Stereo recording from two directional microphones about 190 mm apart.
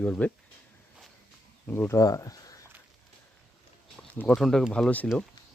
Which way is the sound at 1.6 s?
10° left (ahead or behind).